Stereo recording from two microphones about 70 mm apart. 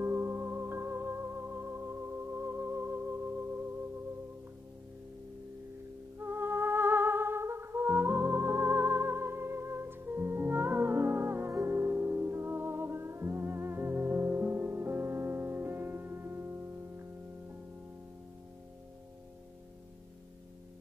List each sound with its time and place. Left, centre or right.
0.0 s music: right
6.1 s music: right